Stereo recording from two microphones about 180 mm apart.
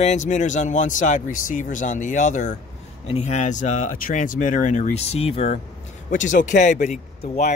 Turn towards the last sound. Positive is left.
turn(degrees=40)  # may be behind; listen again after turning